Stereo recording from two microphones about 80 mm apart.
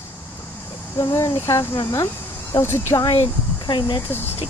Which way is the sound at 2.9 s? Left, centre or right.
Left.